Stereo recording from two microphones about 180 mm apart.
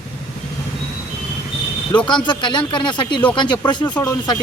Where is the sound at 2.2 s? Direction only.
25° left (ahead or behind).